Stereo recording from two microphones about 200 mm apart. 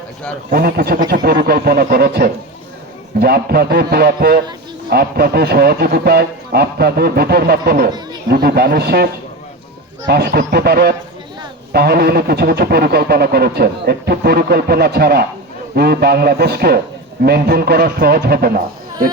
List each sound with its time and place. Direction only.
0.5 s speech: 50° right (ahead or behind)
10.1 s speech: 55° right (ahead or behind)